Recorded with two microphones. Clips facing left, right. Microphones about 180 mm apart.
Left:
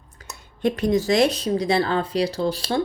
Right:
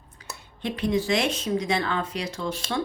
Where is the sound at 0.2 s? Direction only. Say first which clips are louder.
Right 1 dB; 45° left (ahead or behind).